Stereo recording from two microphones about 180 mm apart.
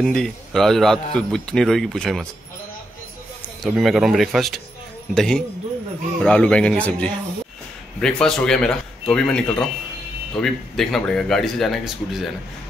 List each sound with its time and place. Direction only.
0.0 s speech: 5° left (ahead or behind)
3.6 s speech: centre (ahead or behind)